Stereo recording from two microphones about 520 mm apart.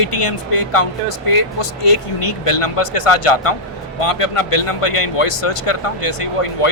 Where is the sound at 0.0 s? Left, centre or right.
Left.